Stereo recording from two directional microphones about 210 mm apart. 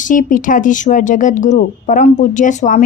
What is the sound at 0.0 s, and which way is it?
A woman's voice, 40° left (ahead or behind).